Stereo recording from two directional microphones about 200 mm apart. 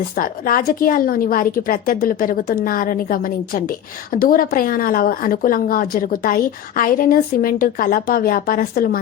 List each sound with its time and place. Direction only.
0.2 s a woman's voice: 45° left (ahead or behind)